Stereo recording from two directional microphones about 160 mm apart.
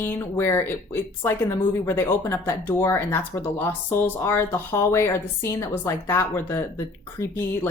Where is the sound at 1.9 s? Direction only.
15° left (ahead or behind).